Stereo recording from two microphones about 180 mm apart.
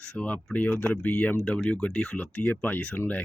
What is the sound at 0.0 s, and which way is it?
Speech, 5° left (ahead or behind).